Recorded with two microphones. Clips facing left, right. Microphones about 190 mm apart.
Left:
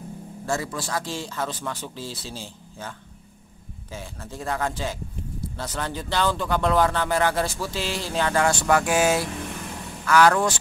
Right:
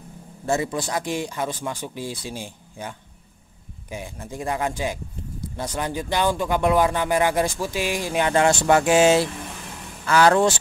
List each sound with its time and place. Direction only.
0.5 s speech: 20° right (ahead or behind)